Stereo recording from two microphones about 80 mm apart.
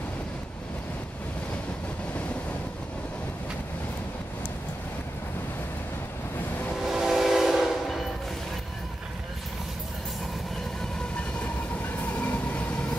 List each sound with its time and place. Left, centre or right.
6.8 s train: centre
12.0 s train: left